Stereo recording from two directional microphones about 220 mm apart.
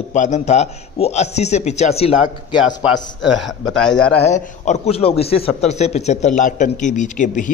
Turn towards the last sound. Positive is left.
turn(degrees=35)  # may be behind; listen again after turning